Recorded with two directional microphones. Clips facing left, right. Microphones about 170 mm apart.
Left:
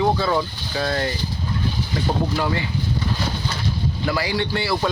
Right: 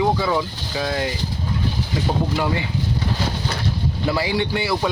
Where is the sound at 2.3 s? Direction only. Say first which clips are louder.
Right 1 dB; 15° right (ahead or behind).